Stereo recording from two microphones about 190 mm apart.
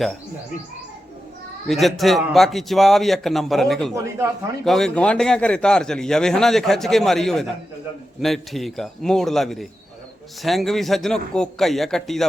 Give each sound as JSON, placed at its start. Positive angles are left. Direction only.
{"t": 1.6, "sound": "a man's voice", "side_deg": 0}
{"t": 3.9, "sound": "speech", "side_deg": -15}
{"t": 4.6, "sound": "a man's voice", "side_deg": 0}